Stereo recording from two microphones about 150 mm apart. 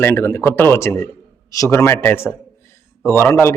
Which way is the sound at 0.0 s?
15° left (ahead or behind).